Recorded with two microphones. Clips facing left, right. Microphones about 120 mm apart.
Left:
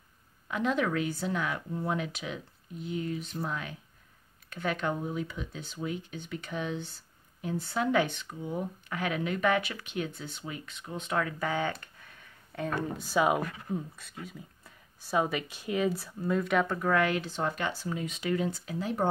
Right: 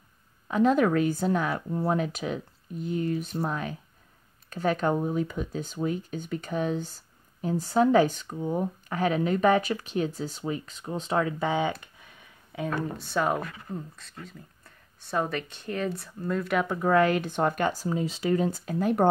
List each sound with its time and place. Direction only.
0.5 s speech: 40° right (ahead or behind); by 11.7 s 20° right (ahead or behind)
11.8 s a sound: 15° right (ahead or behind)
12.6 s speech: centre (ahead or behind)
16.6 s speech: 15° right (ahead or behind)
16.9 s speech: 40° right (ahead or behind)
17.8 s speech: 30° right (ahead or behind); by 19.0 s 55° right (ahead or behind)